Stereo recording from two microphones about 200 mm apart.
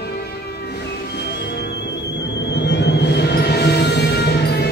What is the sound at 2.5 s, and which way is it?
Music, 60° left (ahead or behind).